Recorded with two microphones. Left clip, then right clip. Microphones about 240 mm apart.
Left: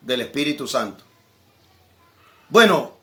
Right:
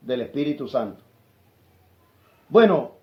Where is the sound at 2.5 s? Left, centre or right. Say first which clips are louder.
Left 2 dB; left.